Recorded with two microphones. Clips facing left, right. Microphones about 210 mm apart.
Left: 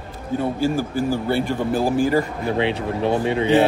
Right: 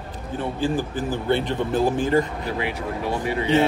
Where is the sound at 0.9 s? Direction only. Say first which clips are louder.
Left 2 dB; 10° left (ahead or behind).